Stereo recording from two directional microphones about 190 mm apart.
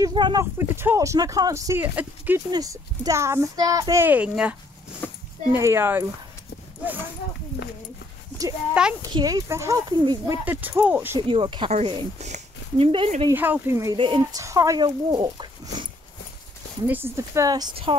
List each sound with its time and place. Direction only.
0.0 s speech: 25° right (ahead or behind); by 4.6 s 5° right (ahead or behind)
5.0 s a sound: 10° left (ahead or behind)
5.5 s speech: 15° right (ahead or behind)
8.8 s a child's voice: 5° right (ahead or behind)
9.1 s speech: 20° right (ahead or behind)
11.1 s speech: 25° right (ahead or behind)
13.3 s speech: 10° right (ahead or behind)
13.9 s speech: 25° right (ahead or behind)
16.8 s speech: 10° right (ahead or behind)